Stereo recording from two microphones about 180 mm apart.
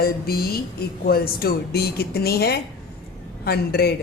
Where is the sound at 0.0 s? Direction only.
55° left (ahead or behind).